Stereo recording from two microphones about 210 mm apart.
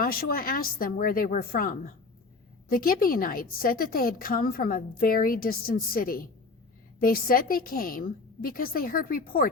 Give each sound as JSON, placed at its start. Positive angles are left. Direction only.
{"t": 0.0, "sound": "a woman's voice", "side_deg": 45}